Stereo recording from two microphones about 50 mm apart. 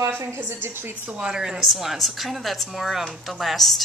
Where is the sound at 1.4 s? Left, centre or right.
Centre.